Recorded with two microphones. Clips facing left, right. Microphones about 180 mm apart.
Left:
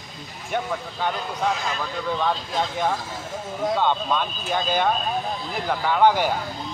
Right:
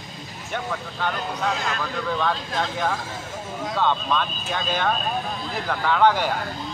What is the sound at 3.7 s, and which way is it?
A man's voice, 15° left (ahead or behind).